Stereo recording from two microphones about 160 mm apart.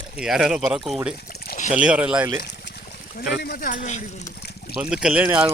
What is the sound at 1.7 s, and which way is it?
Speech, 10° right (ahead or behind).